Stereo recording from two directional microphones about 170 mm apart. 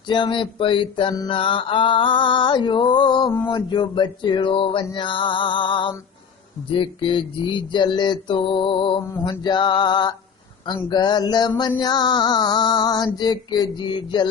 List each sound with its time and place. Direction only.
0.1 s music: 30° left (ahead or behind)